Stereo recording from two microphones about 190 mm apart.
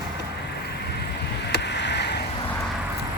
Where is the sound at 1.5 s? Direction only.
65° left (ahead or behind).